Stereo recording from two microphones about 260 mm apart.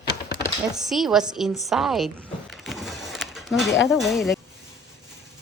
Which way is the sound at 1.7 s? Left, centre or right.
Centre.